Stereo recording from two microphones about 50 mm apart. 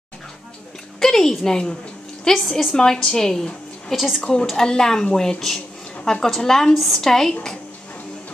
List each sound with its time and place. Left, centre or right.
0.9 s a sound: centre
1.3 s a woman's voice: centre
3.9 s a woman's voice: centre
4.2 s a woman's voice: centre